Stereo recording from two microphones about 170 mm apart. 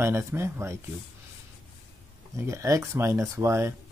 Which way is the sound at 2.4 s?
15° right (ahead or behind).